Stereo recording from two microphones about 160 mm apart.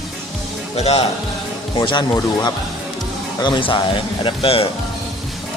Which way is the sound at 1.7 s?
30° left (ahead or behind).